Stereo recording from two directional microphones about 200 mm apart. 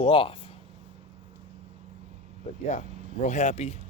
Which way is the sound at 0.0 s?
25° left (ahead or behind).